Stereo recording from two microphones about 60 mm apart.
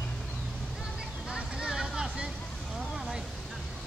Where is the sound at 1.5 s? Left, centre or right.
Centre.